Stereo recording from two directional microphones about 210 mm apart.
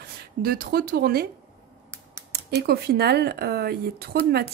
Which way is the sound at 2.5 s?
50° right (ahead or behind).